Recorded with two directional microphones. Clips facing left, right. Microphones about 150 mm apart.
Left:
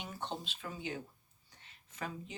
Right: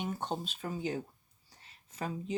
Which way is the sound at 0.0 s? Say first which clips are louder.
Right 6 dB; 45° right (ahead or behind).